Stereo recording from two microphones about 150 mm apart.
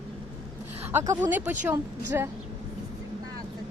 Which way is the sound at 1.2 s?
15° right (ahead or behind).